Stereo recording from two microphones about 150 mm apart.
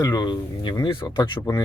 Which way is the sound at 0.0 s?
25° left (ahead or behind).